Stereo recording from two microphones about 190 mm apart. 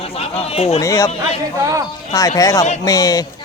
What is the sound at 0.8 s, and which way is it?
Speech, 15° left (ahead or behind).